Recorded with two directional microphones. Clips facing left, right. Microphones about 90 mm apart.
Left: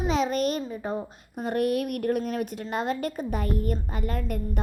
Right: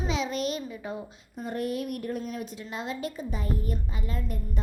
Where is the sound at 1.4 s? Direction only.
65° left (ahead or behind).